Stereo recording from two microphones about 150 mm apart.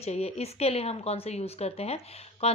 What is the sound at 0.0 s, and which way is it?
Speech, 45° left (ahead or behind).